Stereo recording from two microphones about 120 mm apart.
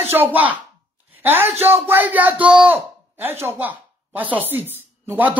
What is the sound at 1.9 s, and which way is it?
Speech, 15° right (ahead or behind).